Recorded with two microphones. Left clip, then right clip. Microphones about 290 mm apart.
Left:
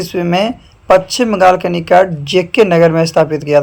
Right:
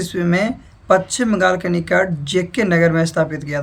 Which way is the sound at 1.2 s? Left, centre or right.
Centre.